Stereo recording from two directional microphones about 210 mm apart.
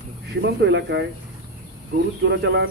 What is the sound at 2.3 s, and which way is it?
Speech, 55° right (ahead or behind).